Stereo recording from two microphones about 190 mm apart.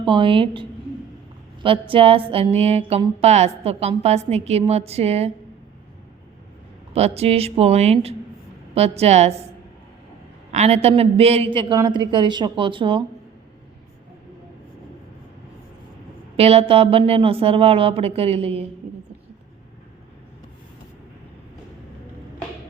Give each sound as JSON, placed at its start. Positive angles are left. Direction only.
{"t": 0.0, "sound": "a woman's voice", "side_deg": -25}
{"t": 1.9, "sound": "speech", "side_deg": -30}
{"t": 6.9, "sound": "speech", "side_deg": -35}
{"t": 10.5, "sound": "a woman's voice", "side_deg": -35}
{"t": 16.4, "sound": "speech", "side_deg": -30}